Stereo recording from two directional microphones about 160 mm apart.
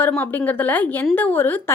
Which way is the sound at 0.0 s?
10° left (ahead or behind).